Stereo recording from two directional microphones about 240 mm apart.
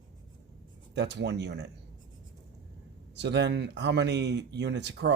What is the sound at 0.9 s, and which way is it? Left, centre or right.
Speech, right.